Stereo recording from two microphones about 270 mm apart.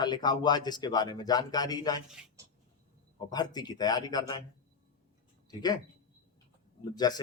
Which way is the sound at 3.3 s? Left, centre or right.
Centre.